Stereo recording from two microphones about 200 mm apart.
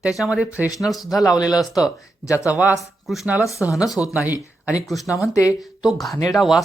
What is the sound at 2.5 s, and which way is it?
Speech, 5° right (ahead or behind).